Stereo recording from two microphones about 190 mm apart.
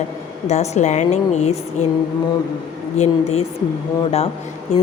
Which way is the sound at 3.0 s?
35° left (ahead or behind).